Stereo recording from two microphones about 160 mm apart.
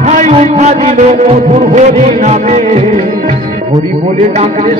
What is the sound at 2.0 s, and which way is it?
Speech, 45° right (ahead or behind).